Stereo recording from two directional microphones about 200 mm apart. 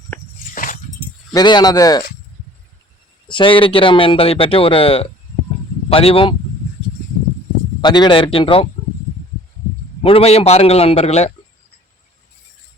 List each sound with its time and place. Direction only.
0.5 s dog: 40° left (ahead or behind)
1.3 s speech: 20° left (ahead or behind)
3.2 s speech: 25° left (ahead or behind)
7.8 s speech: 20° left (ahead or behind)
10.0 s a man's voice: 30° left (ahead or behind)